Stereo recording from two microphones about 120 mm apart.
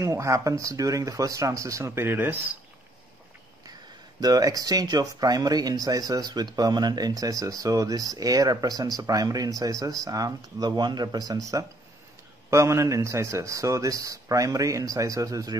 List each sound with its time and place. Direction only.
0.0 s speech: 25° right (ahead or behind)
4.2 s speech: 30° right (ahead or behind)